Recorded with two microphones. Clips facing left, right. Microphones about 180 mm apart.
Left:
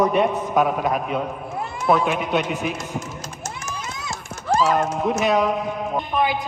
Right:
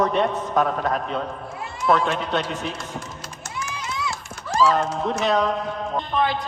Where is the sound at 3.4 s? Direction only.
45° left (ahead or behind).